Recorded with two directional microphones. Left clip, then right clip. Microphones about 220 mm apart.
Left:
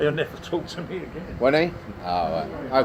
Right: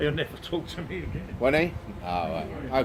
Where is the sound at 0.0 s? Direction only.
25° right (ahead or behind).